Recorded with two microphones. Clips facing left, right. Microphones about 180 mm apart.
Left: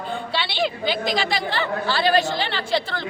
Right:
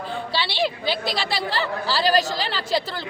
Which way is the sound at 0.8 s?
35° right (ahead or behind).